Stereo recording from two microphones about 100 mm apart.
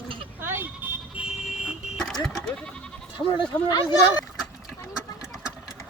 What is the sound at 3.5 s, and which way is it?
Speech, 40° left (ahead or behind).